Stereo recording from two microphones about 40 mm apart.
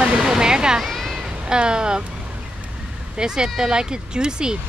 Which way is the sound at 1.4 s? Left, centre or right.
Right.